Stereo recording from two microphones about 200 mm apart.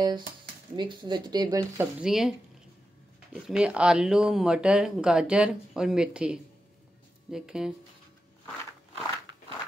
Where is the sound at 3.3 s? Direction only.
5° right (ahead or behind).